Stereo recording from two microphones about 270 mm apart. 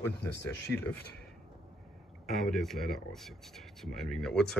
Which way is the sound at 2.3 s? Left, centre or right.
Centre.